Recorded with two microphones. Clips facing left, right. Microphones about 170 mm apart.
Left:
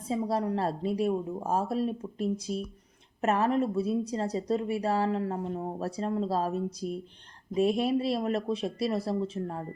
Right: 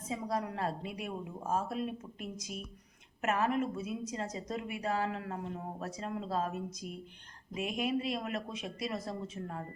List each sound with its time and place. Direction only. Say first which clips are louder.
0.1 s a woman's voice: left 7 dB; 30° left (ahead or behind)